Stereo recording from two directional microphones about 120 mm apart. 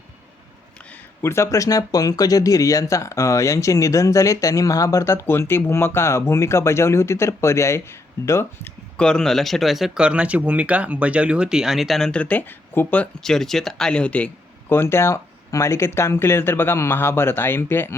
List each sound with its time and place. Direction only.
1.2 s speech: 20° left (ahead or behind)
9.0 s speech: 5° left (ahead or behind)